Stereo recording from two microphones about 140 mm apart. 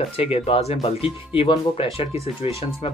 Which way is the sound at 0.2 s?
45° left (ahead or behind).